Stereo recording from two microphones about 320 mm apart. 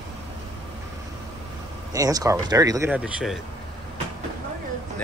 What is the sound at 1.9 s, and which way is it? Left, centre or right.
Speech, centre.